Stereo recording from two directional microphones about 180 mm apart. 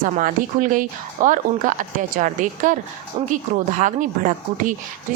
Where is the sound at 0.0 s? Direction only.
50° right (ahead or behind).